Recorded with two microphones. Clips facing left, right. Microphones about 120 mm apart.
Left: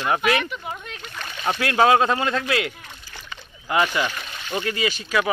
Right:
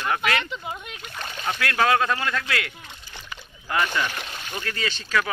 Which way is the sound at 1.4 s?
25° left (ahead or behind).